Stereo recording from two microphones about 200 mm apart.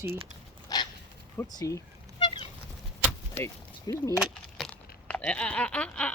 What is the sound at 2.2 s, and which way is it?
Fowl, 25° left (ahead or behind).